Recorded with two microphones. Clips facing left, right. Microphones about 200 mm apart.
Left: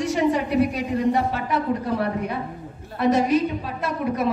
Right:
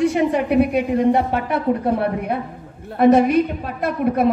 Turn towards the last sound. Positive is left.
turn(degrees=-55)  # may be behind; listen again after turning